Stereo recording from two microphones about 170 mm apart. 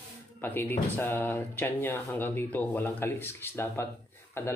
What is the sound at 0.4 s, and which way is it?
Speech, 10° left (ahead or behind).